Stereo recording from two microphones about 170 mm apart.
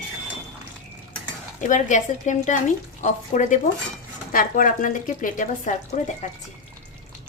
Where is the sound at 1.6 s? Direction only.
45° left (ahead or behind).